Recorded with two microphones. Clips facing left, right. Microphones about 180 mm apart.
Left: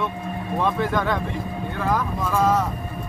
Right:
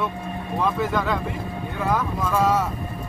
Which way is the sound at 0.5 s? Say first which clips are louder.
Left 1 dB; centre (ahead or behind).